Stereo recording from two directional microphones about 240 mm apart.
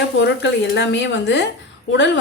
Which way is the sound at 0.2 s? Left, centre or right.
Left.